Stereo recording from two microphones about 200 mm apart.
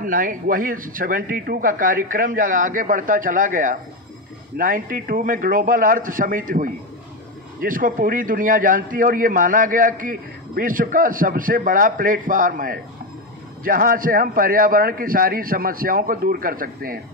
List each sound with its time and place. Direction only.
0.0 s a man's voice: 45° right (ahead or behind)